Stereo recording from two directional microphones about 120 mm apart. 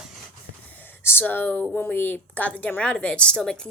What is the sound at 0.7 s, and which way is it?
A woman's voice, 15° left (ahead or behind).